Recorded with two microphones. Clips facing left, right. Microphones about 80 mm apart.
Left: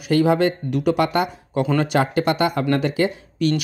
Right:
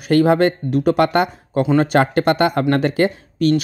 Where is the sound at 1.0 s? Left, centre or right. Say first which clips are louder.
Right 4 dB; right.